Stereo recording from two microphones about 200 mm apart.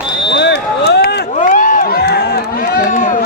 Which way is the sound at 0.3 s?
55° left (ahead or behind).